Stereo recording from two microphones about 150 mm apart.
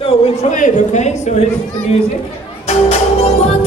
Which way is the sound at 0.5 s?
55° left (ahead or behind).